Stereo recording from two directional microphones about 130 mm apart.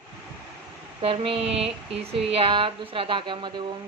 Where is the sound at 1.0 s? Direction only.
45° right (ahead or behind).